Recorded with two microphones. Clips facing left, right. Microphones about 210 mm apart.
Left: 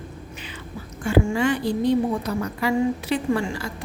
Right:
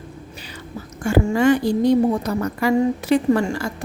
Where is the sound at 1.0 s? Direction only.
45° right (ahead or behind).